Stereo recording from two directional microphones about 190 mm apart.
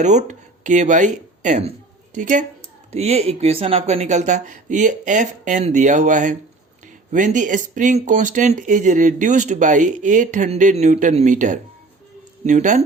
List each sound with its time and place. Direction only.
0.0 s speech: 40° right (ahead or behind)